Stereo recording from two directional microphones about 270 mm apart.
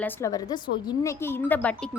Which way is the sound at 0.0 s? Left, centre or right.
Centre.